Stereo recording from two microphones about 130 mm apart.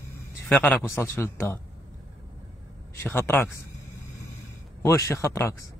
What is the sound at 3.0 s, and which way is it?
Speech, 15° left (ahead or behind).